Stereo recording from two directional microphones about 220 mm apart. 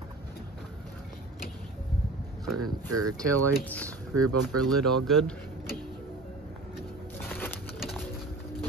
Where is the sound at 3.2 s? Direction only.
5° left (ahead or behind).